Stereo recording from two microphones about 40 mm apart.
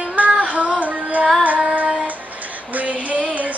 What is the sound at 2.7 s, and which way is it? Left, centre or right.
Music, right.